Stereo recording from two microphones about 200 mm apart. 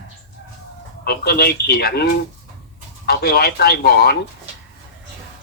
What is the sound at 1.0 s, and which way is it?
Speech, 50° left (ahead or behind).